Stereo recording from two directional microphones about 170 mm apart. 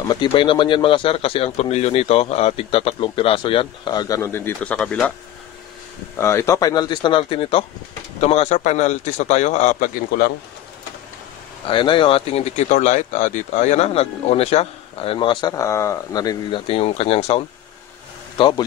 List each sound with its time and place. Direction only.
0.1 s speech: 30° left (ahead or behind); by 5.1 s 5° left (ahead or behind)
6.1 s speech: 15° left (ahead or behind); by 10.3 s 55° left (ahead or behind)
11.6 s speech: 30° left (ahead or behind)